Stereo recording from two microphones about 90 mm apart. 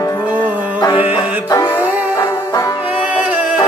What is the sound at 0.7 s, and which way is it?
Music, 60° left (ahead or behind).